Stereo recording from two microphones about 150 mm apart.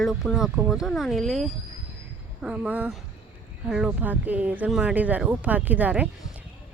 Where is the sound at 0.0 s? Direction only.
Centre (ahead or behind).